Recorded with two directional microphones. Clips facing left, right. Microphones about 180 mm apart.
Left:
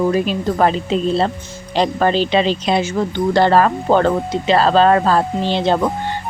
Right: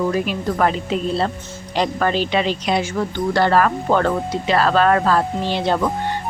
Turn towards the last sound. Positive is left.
turn(degrees=25)  # may be behind; listen again after turning